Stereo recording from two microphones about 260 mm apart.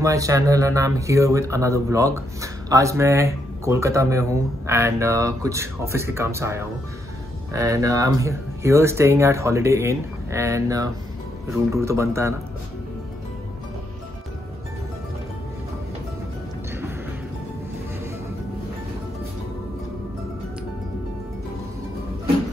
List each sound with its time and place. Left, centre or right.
0.0 s speech: centre